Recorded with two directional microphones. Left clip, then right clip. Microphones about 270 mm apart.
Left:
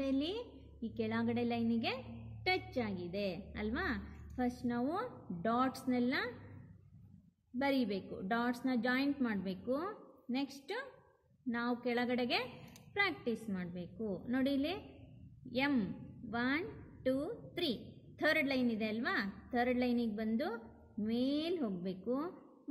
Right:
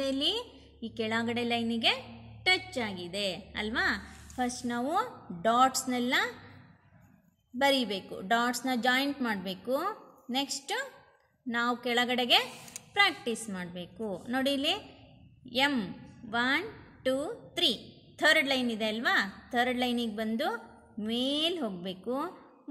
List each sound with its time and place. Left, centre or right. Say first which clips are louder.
0.0 s a woman's voice: right 8 dB; right
7.5 s a woman's voice: right 8 dB; right